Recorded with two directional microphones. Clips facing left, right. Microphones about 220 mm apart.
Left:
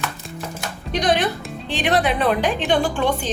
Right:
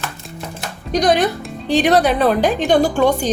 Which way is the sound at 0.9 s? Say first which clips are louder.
Right 5 dB; 40° right (ahead or behind).